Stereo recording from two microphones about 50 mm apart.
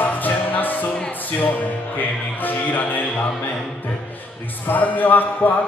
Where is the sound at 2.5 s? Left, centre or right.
Left.